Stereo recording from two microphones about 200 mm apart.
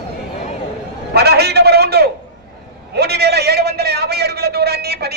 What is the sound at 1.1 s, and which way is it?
A man's voice, 55° right (ahead or behind).